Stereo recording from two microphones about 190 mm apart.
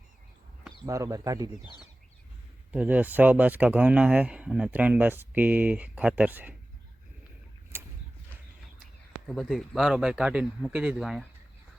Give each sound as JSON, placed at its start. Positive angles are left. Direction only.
{"t": 0.9, "sound": "speech", "side_deg": -15}
{"t": 2.7, "sound": "speech", "side_deg": -10}
{"t": 7.7, "sound": "a sound", "side_deg": -10}
{"t": 9.2, "sound": "speech", "side_deg": 0}